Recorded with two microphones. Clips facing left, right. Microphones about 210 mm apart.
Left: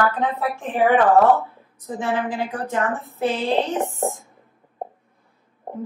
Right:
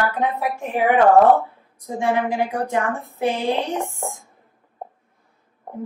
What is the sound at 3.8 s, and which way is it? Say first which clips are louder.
Speech: left 4 dB; 15° left (ahead or behind).